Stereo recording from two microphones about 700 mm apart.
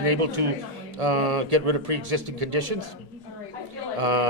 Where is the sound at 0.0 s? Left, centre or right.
Right.